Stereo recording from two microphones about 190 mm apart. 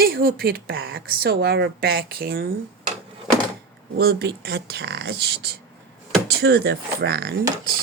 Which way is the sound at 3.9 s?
55° right (ahead or behind).